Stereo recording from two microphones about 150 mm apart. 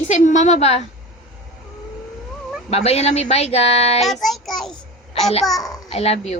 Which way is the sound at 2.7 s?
45° left (ahead or behind).